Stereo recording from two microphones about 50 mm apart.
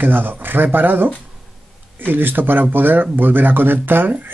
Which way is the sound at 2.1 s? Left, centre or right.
Right.